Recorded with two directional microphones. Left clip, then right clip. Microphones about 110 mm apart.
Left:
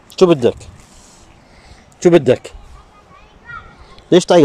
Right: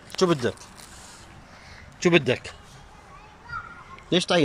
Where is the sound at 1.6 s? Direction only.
90° left.